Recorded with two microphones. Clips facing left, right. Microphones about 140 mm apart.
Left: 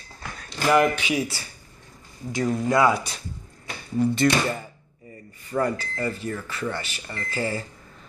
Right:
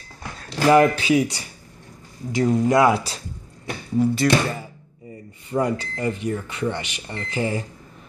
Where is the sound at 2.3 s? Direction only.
20° right (ahead or behind).